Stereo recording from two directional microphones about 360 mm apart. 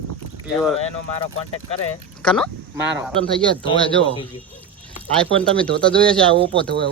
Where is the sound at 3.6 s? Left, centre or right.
Centre.